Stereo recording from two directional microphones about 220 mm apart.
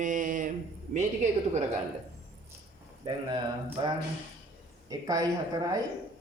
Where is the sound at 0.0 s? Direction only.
35° right (ahead or behind).